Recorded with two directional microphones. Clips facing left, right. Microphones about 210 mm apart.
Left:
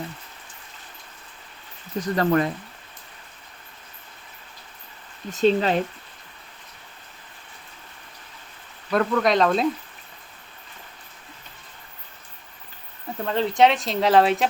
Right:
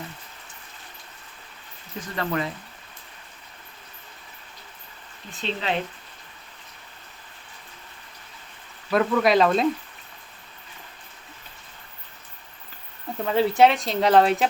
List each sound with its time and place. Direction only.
2.0 s speech: 45° left (ahead or behind)
5.3 s speech: 45° left (ahead or behind)
8.9 s speech: 5° right (ahead or behind)
13.1 s speech: 5° right (ahead or behind)